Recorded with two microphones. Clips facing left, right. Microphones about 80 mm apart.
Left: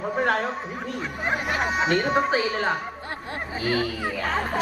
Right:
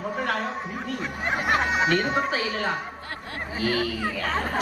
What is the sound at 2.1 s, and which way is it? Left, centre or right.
Speech, left.